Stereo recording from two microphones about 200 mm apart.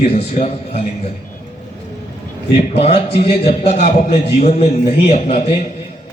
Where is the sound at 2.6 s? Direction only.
30° left (ahead or behind).